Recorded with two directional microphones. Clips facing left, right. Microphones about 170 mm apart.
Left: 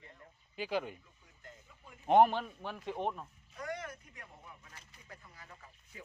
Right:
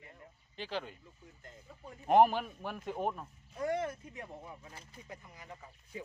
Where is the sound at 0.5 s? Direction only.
10° left (ahead or behind).